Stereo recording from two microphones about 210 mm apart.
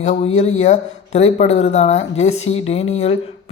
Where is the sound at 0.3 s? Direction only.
30° left (ahead or behind).